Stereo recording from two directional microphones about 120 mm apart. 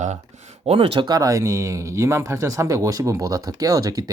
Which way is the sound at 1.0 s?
30° right (ahead or behind).